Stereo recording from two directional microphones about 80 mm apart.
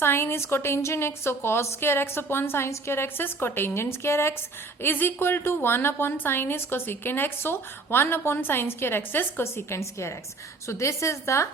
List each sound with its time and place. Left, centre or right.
0.0 s a woman's voice: left